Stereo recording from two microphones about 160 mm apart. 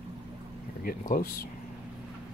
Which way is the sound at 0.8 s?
60° left (ahead or behind).